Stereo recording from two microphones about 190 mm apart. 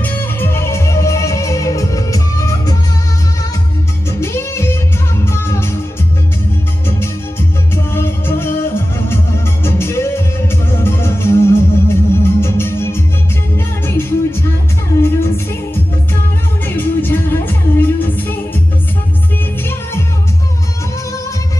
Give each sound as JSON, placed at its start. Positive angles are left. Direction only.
{"t": 0.0, "sound": "music", "side_deg": 10}
{"t": 4.1, "sound": "music", "side_deg": 15}
{"t": 7.0, "sound": "music", "side_deg": 15}
{"t": 19.6, "sound": "music", "side_deg": 15}